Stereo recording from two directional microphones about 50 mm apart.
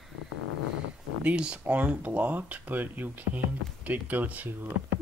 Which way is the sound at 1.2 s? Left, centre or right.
Right.